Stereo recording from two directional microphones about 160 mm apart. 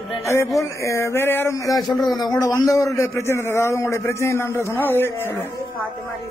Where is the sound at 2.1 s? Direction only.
25° left (ahead or behind).